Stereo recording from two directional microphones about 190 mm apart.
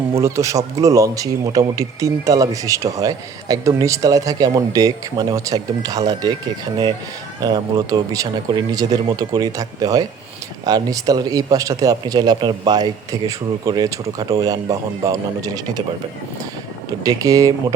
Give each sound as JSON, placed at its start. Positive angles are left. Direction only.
{"t": 0.2, "sound": "speech", "side_deg": -15}
{"t": 7.4, "sound": "speech", "side_deg": -20}
{"t": 17.0, "sound": "speech", "side_deg": -20}